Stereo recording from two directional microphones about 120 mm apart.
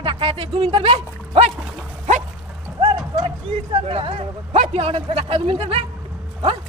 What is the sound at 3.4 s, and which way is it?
Speech, 55° right (ahead or behind).